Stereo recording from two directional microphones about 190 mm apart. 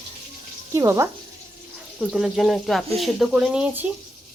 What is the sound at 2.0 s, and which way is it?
Speech, 5° right (ahead or behind).